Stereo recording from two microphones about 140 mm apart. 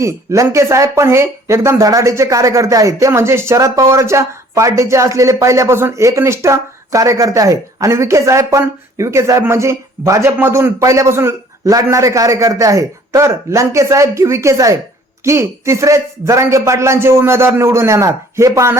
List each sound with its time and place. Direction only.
0.0 s speech: 20° right (ahead or behind)